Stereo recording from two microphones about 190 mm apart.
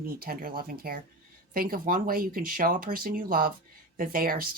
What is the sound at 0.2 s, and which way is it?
Speech, 50° right (ahead or behind).